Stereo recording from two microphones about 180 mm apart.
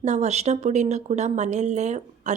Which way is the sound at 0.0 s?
40° right (ahead or behind).